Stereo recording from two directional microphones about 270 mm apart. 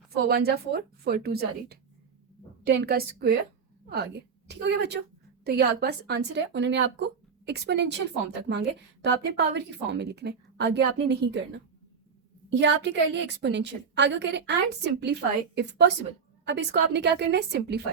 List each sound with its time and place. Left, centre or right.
0.1 s a woman's voice: right